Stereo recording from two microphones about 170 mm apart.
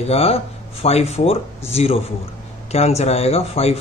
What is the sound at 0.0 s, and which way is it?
Speech, 35° left (ahead or behind).